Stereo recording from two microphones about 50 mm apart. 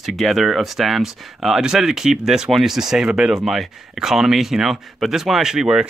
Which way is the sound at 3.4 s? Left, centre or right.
Centre.